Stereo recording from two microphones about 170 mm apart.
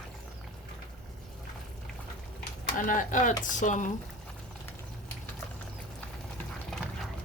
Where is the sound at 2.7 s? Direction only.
50° left (ahead or behind).